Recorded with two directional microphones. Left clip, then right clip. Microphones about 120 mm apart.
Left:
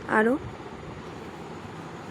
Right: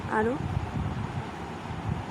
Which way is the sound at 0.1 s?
55° left (ahead or behind).